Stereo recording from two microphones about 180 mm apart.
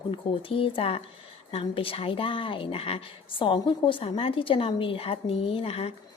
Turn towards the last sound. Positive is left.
turn(degrees=35)  # may be behind; listen again after turning